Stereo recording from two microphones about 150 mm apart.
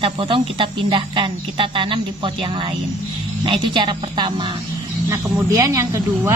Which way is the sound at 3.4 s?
35° right (ahead or behind).